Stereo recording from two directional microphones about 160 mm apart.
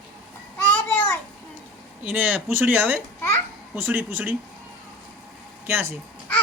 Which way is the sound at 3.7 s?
10° right (ahead or behind).